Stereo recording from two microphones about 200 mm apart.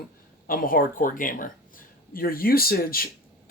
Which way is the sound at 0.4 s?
45° left (ahead or behind).